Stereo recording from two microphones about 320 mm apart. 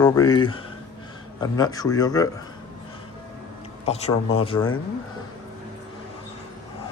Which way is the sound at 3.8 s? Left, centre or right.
Centre.